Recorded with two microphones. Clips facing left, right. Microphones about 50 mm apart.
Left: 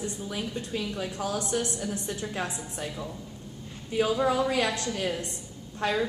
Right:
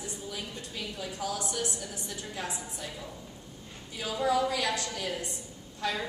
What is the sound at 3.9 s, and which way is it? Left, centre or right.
A woman's voice, left.